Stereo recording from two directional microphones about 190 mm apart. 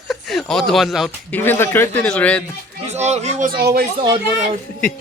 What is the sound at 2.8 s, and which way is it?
Speech, 35° right (ahead or behind).